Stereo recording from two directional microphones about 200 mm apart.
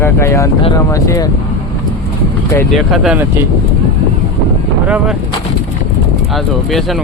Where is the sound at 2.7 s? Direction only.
Centre (ahead or behind).